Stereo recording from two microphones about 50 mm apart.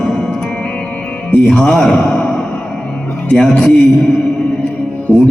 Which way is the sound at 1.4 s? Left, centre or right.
Centre.